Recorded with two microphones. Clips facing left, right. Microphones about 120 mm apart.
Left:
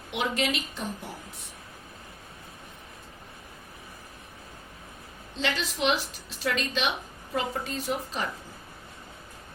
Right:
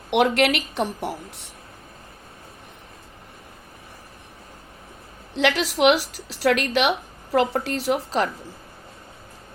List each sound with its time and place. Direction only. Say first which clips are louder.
0.1 s a woman's voice: right 10 dB; 75° right (ahead or behind)
5.3 s a woman's voice: right 9 dB; 75° right (ahead or behind)